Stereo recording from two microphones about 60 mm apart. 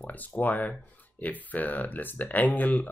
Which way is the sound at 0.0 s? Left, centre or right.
Left.